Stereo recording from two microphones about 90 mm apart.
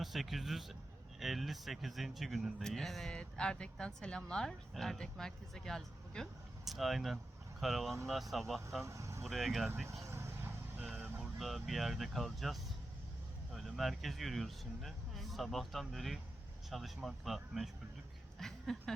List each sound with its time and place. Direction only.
0.0 s a man's voice: centre (ahead or behind)
8.8 s speech: 35° right (ahead or behind)
9.2 s a man's voice: centre (ahead or behind)
10.0 s vehicle: 30° right (ahead or behind)
11.2 s a man's voice: centre (ahead or behind)